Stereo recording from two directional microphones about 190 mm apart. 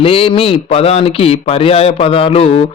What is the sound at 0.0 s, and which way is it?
Speech, 30° left (ahead or behind).